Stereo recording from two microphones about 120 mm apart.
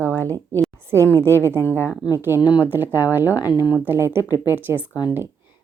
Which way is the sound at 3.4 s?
35° left (ahead or behind).